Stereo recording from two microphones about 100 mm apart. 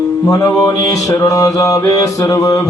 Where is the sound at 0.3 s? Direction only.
35° left (ahead or behind).